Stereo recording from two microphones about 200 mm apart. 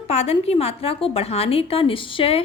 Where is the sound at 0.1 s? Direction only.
30° left (ahead or behind).